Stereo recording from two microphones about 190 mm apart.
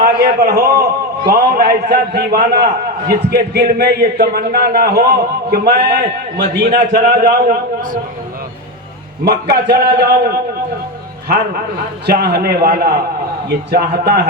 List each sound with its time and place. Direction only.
0.0 s a man's voice: 55° right (ahead or behind)
9.2 s a man's voice: 55° right (ahead or behind)
12.0 s a man's voice: 60° right (ahead or behind)